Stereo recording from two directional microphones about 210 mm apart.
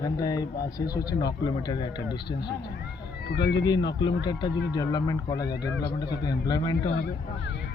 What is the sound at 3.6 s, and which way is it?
Speech, 20° left (ahead or behind).